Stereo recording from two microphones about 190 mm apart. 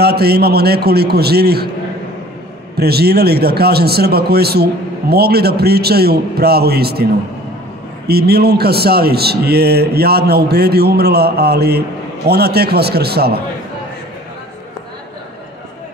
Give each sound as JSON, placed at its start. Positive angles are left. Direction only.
{"t": 0.0, "sound": "a man's voice", "side_deg": -55}
{"t": 2.8, "sound": "a man's voice", "side_deg": -55}
{"t": 8.1, "sound": "a man's voice", "side_deg": -55}